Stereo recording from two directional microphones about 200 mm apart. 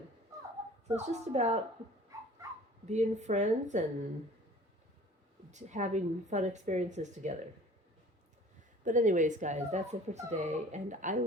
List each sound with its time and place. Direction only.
0.9 s speech: 35° right (ahead or behind)
2.1 s dog: 15° right (ahead or behind)
2.8 s speech: 35° right (ahead or behind)
5.5 s speech: 35° right (ahead or behind)
8.8 s speech: 40° right (ahead or behind)